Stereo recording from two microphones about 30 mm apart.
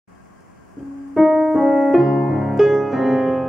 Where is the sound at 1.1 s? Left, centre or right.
Centre.